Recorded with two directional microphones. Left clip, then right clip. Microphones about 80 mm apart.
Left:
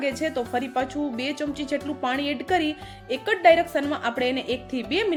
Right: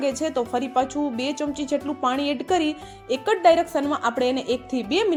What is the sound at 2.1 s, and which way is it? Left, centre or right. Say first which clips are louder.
Speech: even; right.